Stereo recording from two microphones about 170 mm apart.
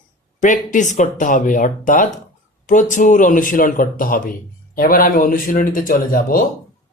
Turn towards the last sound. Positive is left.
turn(degrees=55)  # may be behind; listen again after turning